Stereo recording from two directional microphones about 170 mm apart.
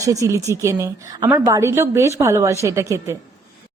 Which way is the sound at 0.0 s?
20° right (ahead or behind).